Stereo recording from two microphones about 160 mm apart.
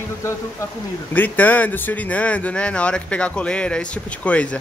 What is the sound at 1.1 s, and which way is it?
Speech, 10° left (ahead or behind).